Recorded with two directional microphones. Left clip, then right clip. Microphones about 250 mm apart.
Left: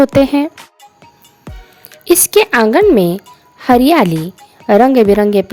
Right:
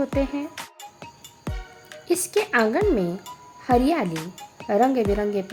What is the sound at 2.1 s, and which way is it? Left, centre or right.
Speech, left.